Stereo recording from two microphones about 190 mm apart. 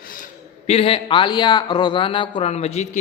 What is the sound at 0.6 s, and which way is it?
A man's voice, 30° left (ahead or behind).